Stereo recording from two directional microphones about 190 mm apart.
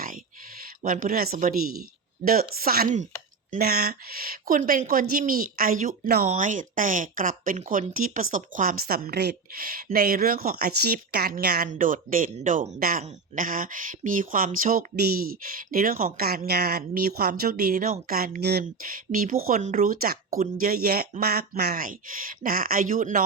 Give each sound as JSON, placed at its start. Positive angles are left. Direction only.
{"t": 0.6, "sound": "speech", "side_deg": -45}
{"t": 3.5, "sound": "speech", "side_deg": -55}
{"t": 6.2, "sound": "speech", "side_deg": -40}